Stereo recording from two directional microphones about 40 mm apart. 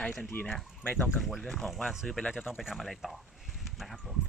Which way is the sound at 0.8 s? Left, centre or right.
Left.